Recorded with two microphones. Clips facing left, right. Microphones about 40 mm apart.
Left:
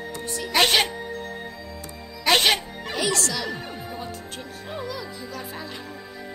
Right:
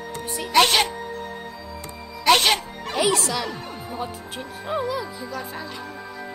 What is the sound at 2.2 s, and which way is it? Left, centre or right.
Music, centre.